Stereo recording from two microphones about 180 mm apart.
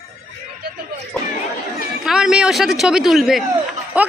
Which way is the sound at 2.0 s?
5° right (ahead or behind).